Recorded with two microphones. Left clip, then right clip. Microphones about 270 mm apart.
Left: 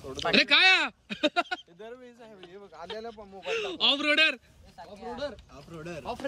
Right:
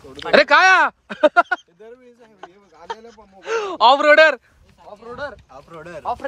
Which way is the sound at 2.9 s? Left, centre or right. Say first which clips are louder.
Left 2 dB; centre.